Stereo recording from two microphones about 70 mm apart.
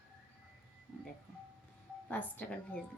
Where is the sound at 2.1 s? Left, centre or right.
Centre.